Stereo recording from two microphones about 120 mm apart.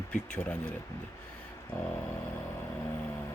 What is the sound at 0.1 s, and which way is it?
Speech, 10° left (ahead or behind).